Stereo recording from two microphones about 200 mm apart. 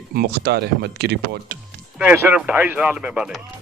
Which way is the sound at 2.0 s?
10° right (ahead or behind).